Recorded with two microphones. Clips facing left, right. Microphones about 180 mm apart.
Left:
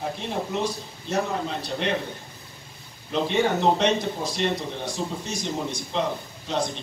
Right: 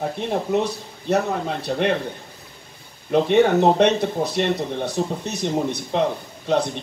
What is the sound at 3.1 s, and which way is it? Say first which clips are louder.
A man's voice: right 7 dB; 60° right (ahead or behind).